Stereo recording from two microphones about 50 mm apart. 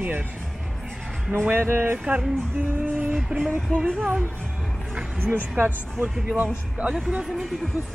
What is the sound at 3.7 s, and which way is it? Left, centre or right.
Speech, left.